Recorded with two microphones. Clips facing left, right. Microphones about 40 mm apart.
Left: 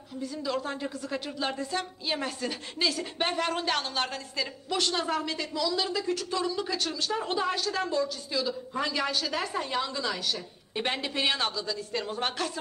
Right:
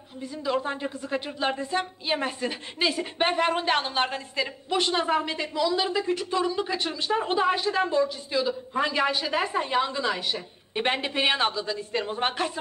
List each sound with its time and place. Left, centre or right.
0.2 s a woman's voice: right